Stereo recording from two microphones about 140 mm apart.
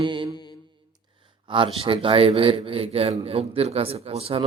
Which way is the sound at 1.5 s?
40° right (ahead or behind).